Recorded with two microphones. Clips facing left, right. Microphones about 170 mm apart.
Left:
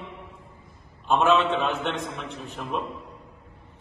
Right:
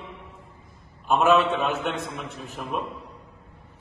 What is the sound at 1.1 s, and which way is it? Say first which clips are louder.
A man's voice: right 1 dB; centre (ahead or behind).